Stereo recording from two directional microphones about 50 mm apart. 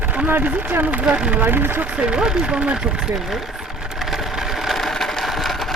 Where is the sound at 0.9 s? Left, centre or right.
Right.